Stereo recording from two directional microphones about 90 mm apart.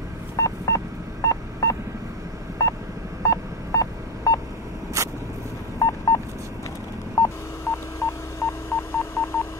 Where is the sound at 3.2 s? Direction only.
40° left (ahead or behind).